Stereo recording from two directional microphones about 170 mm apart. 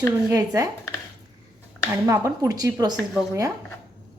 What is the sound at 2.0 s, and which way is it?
Speech, 20° right (ahead or behind).